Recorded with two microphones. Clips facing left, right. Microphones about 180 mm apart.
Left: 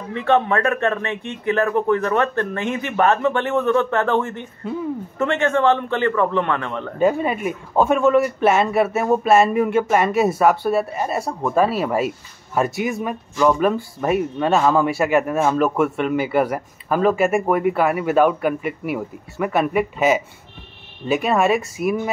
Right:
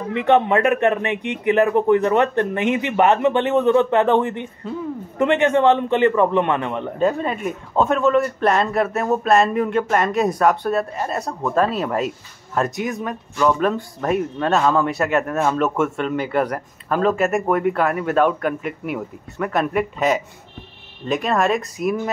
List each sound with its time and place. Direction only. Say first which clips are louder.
0.1 s speech: right 2 dB; 20° right (ahead or behind)
7.0 s speech: left 2 dB; 5° left (ahead or behind)